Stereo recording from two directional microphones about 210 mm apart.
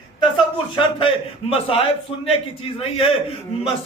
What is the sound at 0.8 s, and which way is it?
A man's voice, 25° left (ahead or behind).